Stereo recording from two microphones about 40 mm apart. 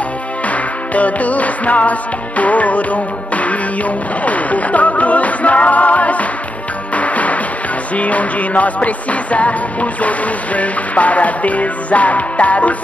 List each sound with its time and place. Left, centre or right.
0.5 s music: left